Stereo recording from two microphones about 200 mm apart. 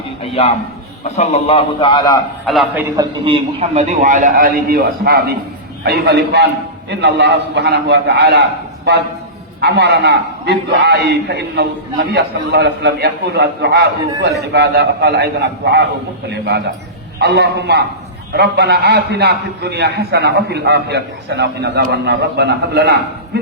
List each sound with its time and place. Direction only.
1.1 s a man's voice: 35° left (ahead or behind)
2.5 s a man's voice: centre (ahead or behind)
2.9 s a man's voice: 20° right (ahead or behind); by 15.8 s 55° right (ahead or behind)
17.2 s a man's voice: 55° right (ahead or behind)